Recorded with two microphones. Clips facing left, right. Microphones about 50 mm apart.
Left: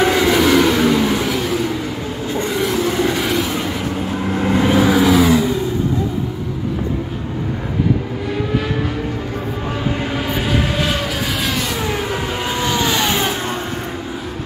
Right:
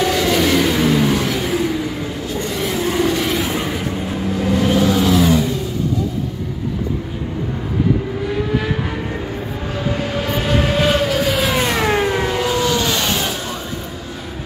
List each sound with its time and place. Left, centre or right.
0.0 s vehicle: centre
0.5 s vehicle: centre
3.0 s vehicle: centre
3.4 s a sound: centre
4.6 s vehicle: centre
8.5 s vehicle: centre
10.2 s train: centre
11.7 s vehicle: right
12.4 s vehicle: centre